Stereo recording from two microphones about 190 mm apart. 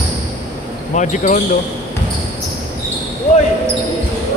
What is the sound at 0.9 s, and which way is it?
Speech, 40° left (ahead or behind).